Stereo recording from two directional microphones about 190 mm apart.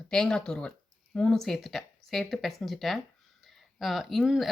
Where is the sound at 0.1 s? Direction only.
5° left (ahead or behind).